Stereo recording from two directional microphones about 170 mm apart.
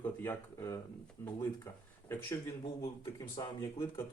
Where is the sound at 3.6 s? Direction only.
15° left (ahead or behind).